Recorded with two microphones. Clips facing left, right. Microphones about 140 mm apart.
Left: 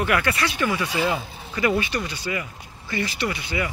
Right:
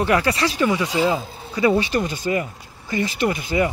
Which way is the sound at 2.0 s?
45° right (ahead or behind).